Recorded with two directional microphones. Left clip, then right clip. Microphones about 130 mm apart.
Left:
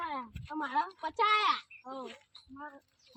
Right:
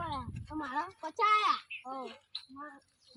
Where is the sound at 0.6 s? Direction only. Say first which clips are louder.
Left 4 dB; 5° left (ahead or behind).